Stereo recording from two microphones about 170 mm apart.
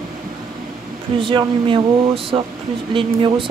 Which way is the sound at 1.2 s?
30° right (ahead or behind).